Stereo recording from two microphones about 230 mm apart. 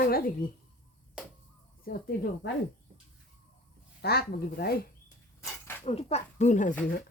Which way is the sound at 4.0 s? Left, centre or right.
Left.